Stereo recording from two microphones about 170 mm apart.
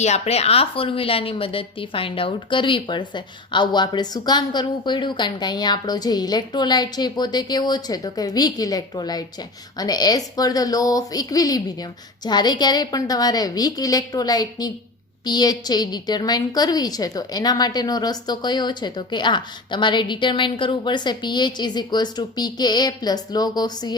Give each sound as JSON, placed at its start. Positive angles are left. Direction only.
{"t": 0.0, "sound": "a woman's voice", "side_deg": 40}